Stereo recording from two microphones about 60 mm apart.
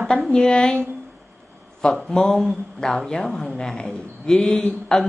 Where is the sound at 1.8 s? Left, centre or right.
Centre.